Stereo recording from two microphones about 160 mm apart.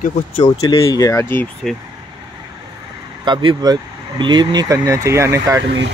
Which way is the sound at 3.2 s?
30° right (ahead or behind).